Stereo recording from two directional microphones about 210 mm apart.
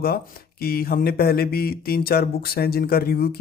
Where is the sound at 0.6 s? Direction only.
45° left (ahead or behind).